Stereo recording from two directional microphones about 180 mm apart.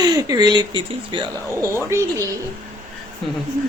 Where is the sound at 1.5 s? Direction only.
15° right (ahead or behind).